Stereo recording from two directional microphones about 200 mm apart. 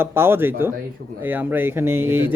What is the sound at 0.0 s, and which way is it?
Speech, 10° right (ahead or behind).